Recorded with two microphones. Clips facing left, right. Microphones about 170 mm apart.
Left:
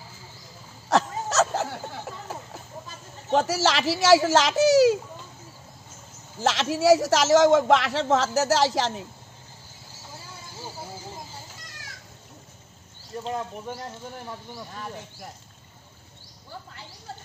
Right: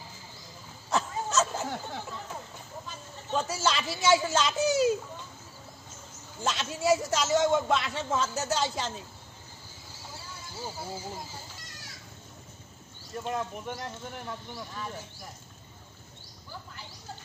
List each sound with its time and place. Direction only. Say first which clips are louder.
0.8 s dog: left 6 dB; 80° left
3.3 s a man's voice: left 7 dB; 85° left
6.4 s a man's voice: left 8 dB; 90° left